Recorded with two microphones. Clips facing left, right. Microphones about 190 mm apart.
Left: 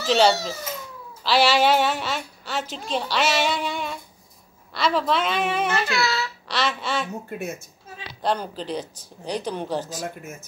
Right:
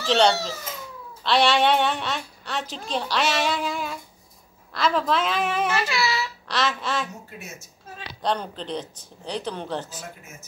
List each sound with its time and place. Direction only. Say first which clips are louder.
0.0 s a woman's voice: left 1 dB; 5° left (ahead or behind)
7.2 s a woman's voice: left 10 dB; 55° left (ahead or behind)
8.2 s speech: left 1 dB; 5° left (ahead or behind)